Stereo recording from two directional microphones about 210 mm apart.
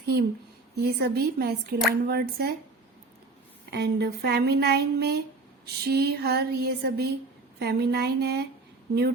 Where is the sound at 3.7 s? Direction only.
55° right (ahead or behind).